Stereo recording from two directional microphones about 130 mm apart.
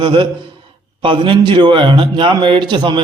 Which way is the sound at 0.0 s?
35° right (ahead or behind).